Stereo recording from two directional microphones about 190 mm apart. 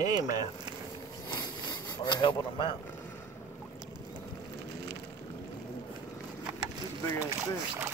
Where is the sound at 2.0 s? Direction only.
25° left (ahead or behind).